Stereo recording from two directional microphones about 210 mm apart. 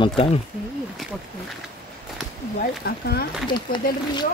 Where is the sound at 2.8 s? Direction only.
50° left (ahead or behind).